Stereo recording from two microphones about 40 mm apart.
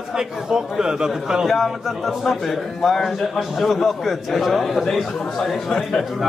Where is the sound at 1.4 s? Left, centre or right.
Centre.